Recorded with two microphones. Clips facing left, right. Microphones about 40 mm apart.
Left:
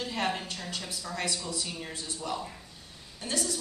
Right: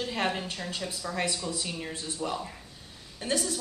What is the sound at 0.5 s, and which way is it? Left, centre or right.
Speech, centre.